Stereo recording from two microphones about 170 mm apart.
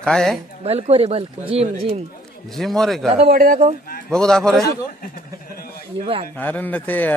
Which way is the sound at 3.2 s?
55° right (ahead or behind).